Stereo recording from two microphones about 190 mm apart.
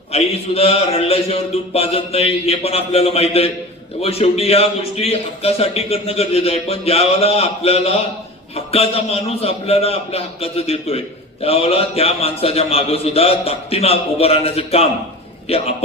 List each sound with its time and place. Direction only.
0.1 s a man's voice: 30° left (ahead or behind)